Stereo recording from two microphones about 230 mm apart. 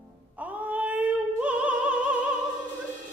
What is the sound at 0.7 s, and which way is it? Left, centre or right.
Opera, centre.